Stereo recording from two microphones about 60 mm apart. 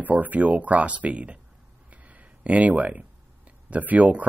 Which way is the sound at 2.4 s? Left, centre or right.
Right.